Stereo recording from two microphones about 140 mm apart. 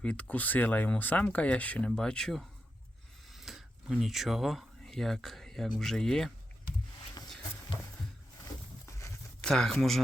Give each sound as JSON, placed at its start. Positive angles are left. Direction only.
{"t": 0.0, "sound": "speech", "side_deg": 10}
{"t": 8.9, "sound": "a sound", "side_deg": 20}
{"t": 9.4, "sound": "speech", "side_deg": 5}